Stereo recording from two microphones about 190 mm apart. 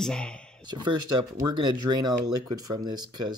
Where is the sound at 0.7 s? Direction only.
25° right (ahead or behind).